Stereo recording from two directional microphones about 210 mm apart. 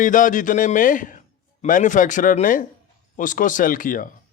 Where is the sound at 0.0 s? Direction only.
40° left (ahead or behind).